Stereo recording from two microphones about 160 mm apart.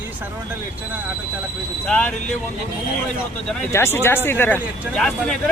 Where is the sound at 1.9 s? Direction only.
10° left (ahead or behind).